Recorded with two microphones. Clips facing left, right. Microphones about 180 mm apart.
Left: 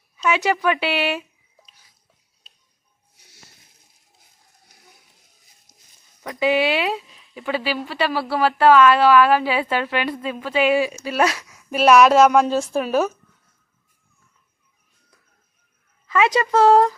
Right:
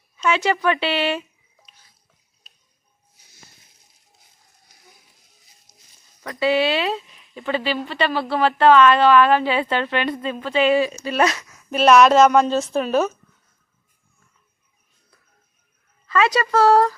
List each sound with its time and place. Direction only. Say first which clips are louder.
0.2 s speech: even; 10° left (ahead or behind)
6.2 s speech: even; 15° left (ahead or behind)
16.0 s speech: left 1 dB; 15° left (ahead or behind)